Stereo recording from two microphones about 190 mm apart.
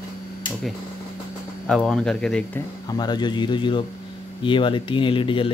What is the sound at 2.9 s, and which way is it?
Speech, 20° left (ahead or behind).